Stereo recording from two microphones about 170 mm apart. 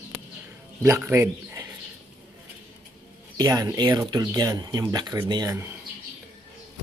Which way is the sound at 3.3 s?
20° right (ahead or behind).